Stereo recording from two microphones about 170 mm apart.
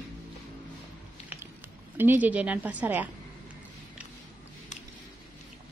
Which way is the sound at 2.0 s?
10° right (ahead or behind).